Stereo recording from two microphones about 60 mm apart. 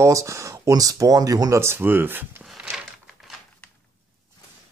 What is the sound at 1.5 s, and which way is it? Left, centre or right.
Speech, right.